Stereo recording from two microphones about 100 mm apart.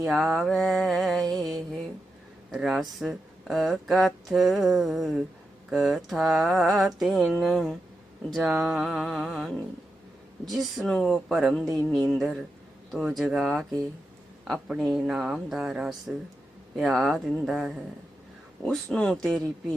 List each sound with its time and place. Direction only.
0.1 s speech: centre (ahead or behind)